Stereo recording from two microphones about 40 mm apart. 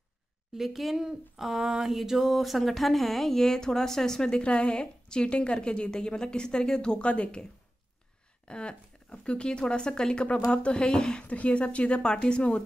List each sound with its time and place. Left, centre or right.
0.6 s a sound: centre
4.4 s a woman's voice: left
8.5 s a woman's voice: left
11.2 s a woman's voice: left